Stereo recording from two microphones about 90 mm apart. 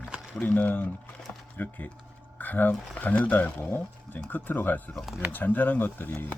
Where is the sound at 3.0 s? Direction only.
15° left (ahead or behind).